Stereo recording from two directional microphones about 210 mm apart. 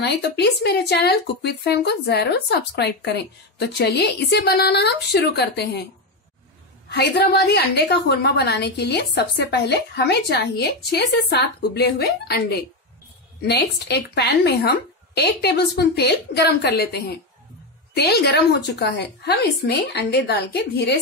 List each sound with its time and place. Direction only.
0.0 s speech: 50° left (ahead or behind)
6.9 s speech: 50° left (ahead or behind)